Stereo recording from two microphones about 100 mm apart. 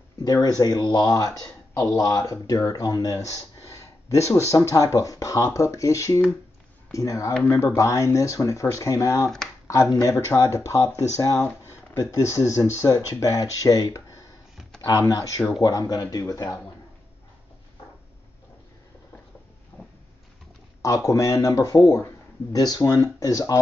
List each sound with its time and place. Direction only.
0.2 s speech: 40° left (ahead or behind)
19.7 s a sound: 20° left (ahead or behind)
20.8 s speech: 35° left (ahead or behind)